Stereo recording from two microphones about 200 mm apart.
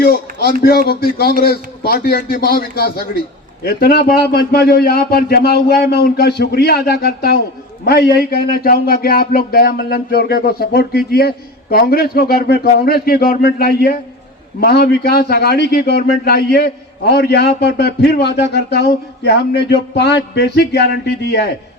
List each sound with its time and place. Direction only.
0.0 s a man's voice: 50° left (ahead or behind)